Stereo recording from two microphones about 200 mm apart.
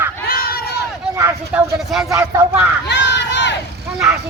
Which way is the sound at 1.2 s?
10° right (ahead or behind).